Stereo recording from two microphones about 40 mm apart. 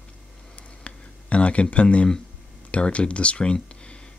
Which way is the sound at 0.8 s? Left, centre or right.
Left.